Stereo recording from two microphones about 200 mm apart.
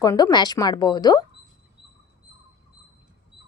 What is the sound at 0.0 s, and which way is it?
Speech, 20° left (ahead or behind).